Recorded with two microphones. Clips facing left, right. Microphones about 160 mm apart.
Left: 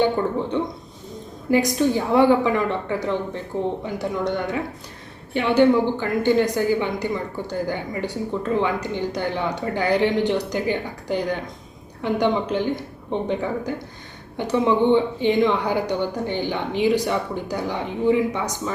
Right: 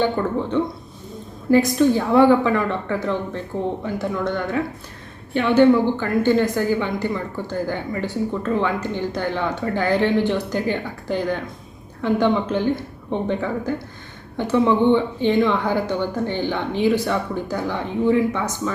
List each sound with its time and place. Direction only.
0.0 s a woman's voice: 15° left (ahead or behind)